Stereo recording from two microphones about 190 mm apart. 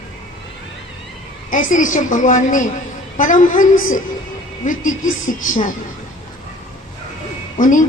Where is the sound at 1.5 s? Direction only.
45° left (ahead or behind).